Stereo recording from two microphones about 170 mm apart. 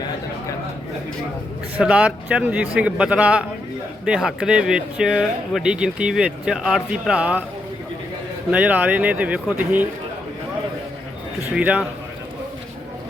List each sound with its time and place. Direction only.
1.8 s speech: 5° right (ahead or behind)
8.4 s speech: 10° right (ahead or behind)
11.5 s speech: 5° right (ahead or behind)